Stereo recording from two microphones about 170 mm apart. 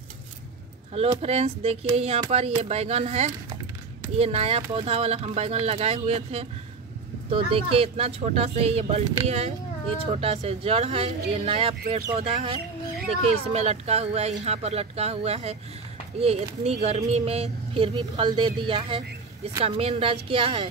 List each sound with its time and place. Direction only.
1.2 s speech: 35° right (ahead or behind)